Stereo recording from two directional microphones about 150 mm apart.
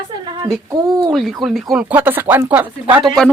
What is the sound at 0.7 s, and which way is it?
Speech, 25° right (ahead or behind).